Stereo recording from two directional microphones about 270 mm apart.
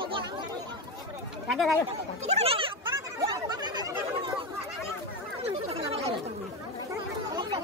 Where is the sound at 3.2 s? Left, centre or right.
Centre.